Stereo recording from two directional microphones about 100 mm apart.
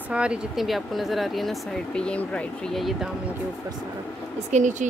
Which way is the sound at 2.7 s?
Centre (ahead or behind).